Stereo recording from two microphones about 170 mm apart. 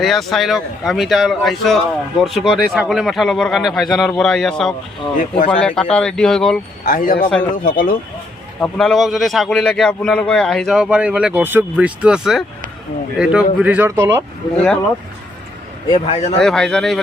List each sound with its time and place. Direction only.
0.0 s a man's voice: centre (ahead or behind)
6.8 s speech: 55° left (ahead or behind)
8.6 s a man's voice: centre (ahead or behind); by 14.3 s 15° right (ahead or behind)
14.5 s a man's voice: 5° left (ahead or behind)
15.9 s speech: 35° left (ahead or behind)
16.4 s a man's voice: 5° left (ahead or behind)